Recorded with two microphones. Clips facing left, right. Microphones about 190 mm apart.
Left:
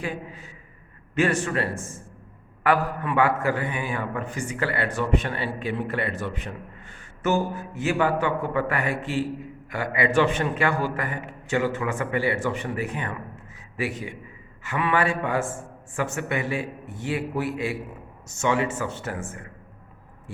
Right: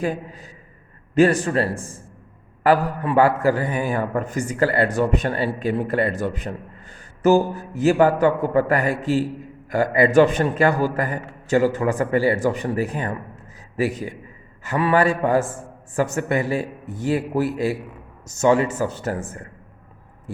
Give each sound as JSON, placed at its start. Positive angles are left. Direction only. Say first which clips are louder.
{"t": 0.0, "sound": "a man's voice", "louder": "right 7 dB", "side_deg": -40}